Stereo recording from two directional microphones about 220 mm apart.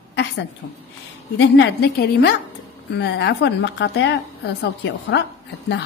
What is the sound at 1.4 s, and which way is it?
A woman's voice, 50° left (ahead or behind).